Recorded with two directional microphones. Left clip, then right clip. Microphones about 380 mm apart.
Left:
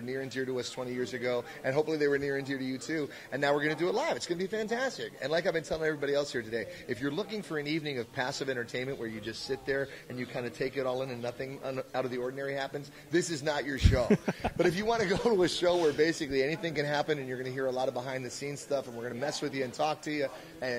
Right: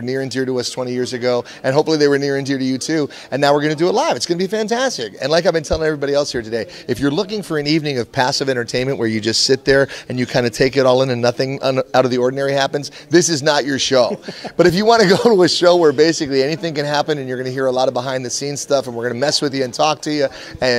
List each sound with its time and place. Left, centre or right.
0.0 s a man's voice: right